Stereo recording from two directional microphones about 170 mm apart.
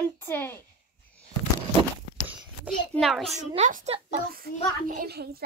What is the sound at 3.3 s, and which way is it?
Speech, 45° right (ahead or behind).